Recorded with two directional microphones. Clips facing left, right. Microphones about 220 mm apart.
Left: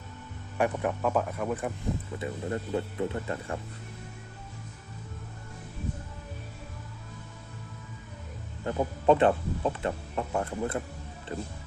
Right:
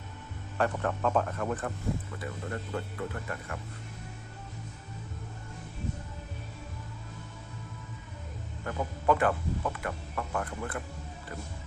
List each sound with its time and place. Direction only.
0.5 s speech: 15° left (ahead or behind)
2.1 s speech: 20° left (ahead or behind)
8.6 s speech: 25° left (ahead or behind)